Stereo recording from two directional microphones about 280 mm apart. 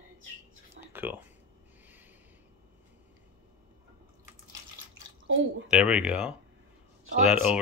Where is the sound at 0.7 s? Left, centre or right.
Centre.